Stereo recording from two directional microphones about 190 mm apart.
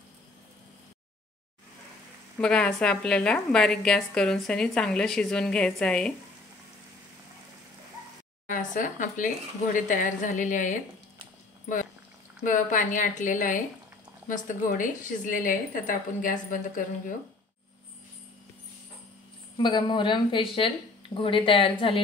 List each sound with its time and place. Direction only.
2.3 s a woman's voice: 5° left (ahead or behind)
8.5 s a woman's voice: 45° left (ahead or behind)
12.4 s a woman's voice: 40° left (ahead or behind)
19.5 s speech: 25° left (ahead or behind)